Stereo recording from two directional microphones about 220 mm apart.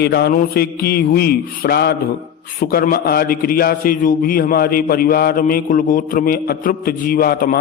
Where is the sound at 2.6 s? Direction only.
40° left (ahead or behind).